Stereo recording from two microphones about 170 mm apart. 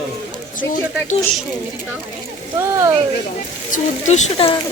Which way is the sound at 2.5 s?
15° right (ahead or behind).